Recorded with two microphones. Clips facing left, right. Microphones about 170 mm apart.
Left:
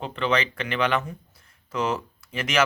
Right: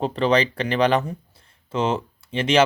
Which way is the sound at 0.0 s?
35° right (ahead or behind).